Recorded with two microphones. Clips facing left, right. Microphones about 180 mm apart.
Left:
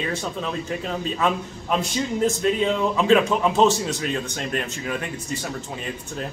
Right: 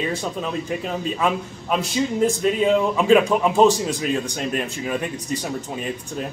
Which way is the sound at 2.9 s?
10° right (ahead or behind).